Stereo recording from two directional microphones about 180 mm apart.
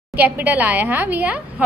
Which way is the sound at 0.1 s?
10° right (ahead or behind).